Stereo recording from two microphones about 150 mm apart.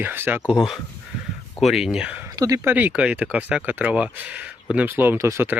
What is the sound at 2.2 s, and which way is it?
Speech, 25° right (ahead or behind).